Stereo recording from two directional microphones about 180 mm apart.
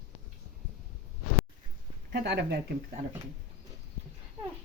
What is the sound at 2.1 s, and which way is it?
Speech, 70° right (ahead or behind).